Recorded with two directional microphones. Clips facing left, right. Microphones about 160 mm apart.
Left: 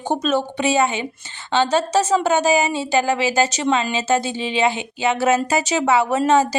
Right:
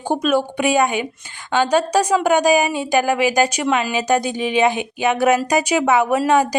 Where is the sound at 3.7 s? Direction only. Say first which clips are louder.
Right 1 dB; 20° left (ahead or behind).